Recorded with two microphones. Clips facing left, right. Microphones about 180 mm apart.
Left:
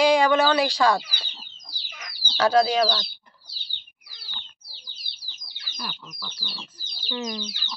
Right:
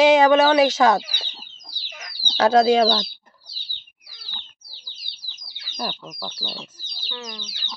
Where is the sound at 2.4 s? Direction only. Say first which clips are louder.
Right 4 dB; 25° right (ahead or behind).